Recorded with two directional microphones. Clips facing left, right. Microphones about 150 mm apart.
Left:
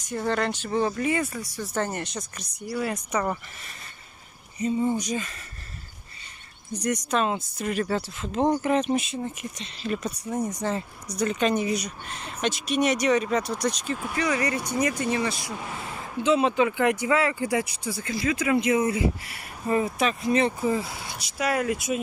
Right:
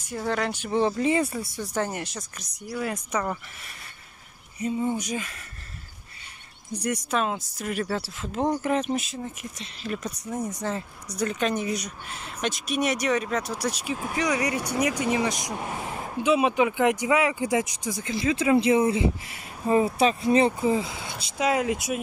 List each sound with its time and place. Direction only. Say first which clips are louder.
0.1 s speech: left 1 dB; 5° right (ahead or behind)
0.7 s speech: right 3 dB; 25° right (ahead or behind)
1.6 s speech: left 1 dB; 10° right (ahead or behind)
4.6 s speech: left 2 dB; 5° right (ahead or behind)
6.7 s speech: left 1 dB; 5° right (ahead or behind)